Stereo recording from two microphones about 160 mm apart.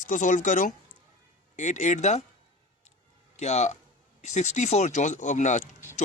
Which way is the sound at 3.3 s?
45° left (ahead or behind).